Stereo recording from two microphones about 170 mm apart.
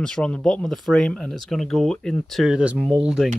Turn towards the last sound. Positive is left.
turn(degrees=-5)  # may be behind; listen again after turning